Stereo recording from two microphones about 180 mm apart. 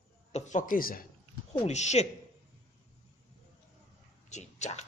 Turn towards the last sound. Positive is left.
turn(degrees=40)  # may be behind; listen again after turning